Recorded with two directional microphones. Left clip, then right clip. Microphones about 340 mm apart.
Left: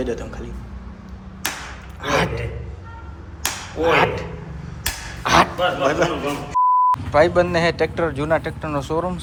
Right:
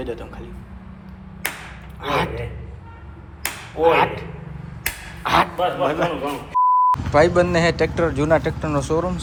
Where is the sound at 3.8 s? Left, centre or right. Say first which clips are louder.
Right 1 dB; centre.